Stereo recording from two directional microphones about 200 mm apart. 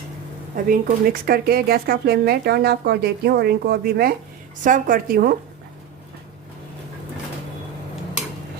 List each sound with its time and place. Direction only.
0.5 s speech: 45° right (ahead or behind)